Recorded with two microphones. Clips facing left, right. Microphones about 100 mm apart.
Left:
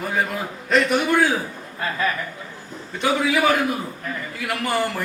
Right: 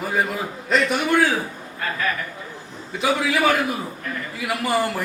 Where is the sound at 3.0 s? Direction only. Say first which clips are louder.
Even; centre (ahead or behind).